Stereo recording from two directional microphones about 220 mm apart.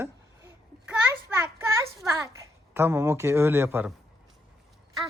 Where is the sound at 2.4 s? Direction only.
10° right (ahead or behind).